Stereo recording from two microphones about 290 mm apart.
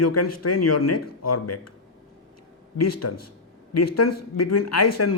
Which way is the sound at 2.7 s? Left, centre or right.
Left.